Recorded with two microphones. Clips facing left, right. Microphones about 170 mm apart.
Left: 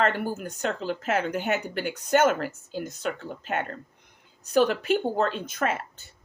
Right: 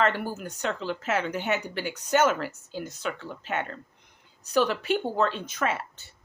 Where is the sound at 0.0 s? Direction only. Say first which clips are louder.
Left 1 dB; 50° left (ahead or behind).